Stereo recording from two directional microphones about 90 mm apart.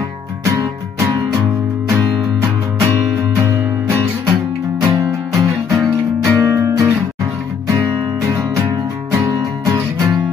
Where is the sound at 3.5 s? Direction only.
30° right (ahead or behind).